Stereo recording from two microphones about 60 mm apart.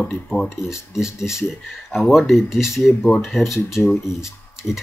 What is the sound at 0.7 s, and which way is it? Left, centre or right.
Speech, centre.